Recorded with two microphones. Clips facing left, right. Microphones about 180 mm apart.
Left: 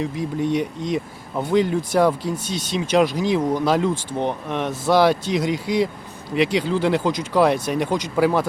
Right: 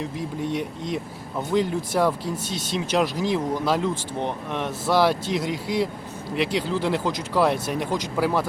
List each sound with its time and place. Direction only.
0.0 s speech: centre (ahead or behind)